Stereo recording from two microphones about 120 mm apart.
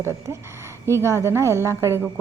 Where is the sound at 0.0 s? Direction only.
20° right (ahead or behind).